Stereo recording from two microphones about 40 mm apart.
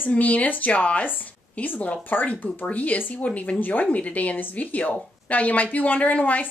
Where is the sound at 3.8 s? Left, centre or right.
Left.